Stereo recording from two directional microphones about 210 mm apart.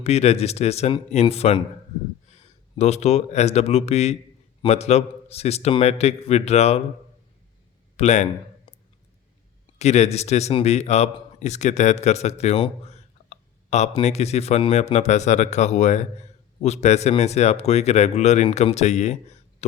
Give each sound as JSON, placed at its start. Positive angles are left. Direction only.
{"t": 0.0, "sound": "a man's voice", "side_deg": 30}
{"t": 7.9, "sound": "speech", "side_deg": 35}
{"t": 9.7, "sound": "a man's voice", "side_deg": 30}